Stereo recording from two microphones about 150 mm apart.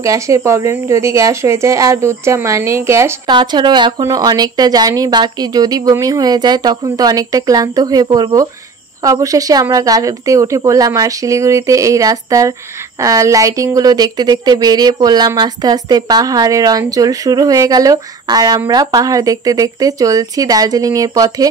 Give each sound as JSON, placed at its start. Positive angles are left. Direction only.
{"t": 0.0, "sound": "speech", "side_deg": -20}
{"t": 3.3, "sound": "speech", "side_deg": -30}